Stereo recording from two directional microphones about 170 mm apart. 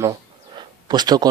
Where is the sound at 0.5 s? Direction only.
25° right (ahead or behind).